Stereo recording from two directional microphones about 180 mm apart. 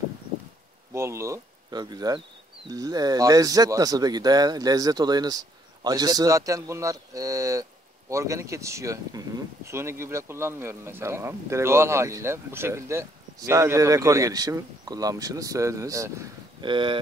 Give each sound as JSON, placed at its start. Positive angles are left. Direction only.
{"t": 0.9, "sound": "speech", "side_deg": -15}